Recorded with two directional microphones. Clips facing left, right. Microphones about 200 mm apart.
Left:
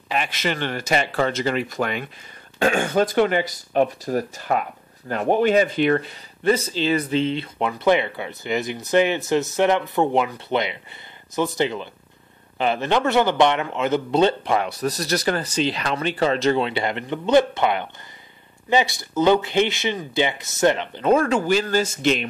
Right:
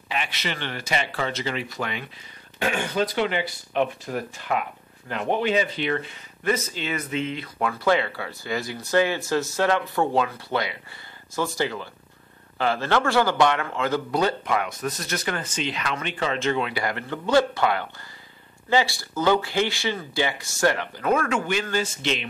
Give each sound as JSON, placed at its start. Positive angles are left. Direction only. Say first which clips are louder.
{"t": 0.1, "sound": "a man's voice", "louder": "left 5 dB", "side_deg": 45}